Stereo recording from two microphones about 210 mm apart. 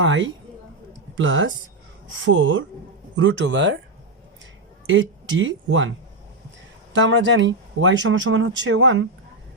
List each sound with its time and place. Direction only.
0.0 s speech: 65° right (ahead or behind)
4.9 s speech: 65° right (ahead or behind)
6.9 s speech: 60° right (ahead or behind)